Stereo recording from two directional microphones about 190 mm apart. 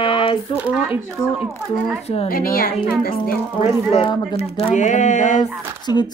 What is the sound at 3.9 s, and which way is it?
Speech, 30° left (ahead or behind).